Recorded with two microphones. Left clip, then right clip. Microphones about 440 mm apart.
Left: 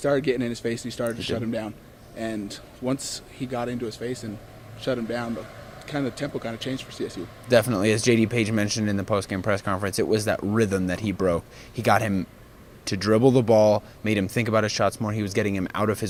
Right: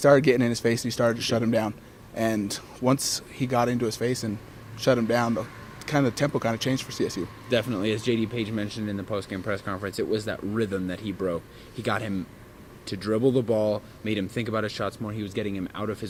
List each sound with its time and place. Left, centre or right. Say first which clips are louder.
0.0 s speech: right 5 dB; right
7.4 s speech: left 6 dB; left